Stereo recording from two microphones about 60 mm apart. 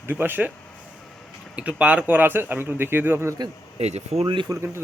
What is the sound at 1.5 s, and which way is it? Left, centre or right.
A man's voice, right.